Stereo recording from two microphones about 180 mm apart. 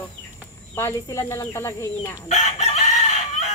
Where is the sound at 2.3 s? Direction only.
40° left (ahead or behind).